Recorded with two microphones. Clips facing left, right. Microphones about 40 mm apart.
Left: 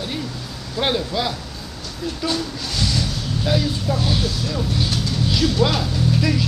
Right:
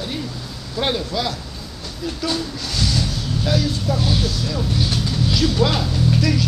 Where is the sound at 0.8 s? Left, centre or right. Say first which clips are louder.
Left 1 dB; centre.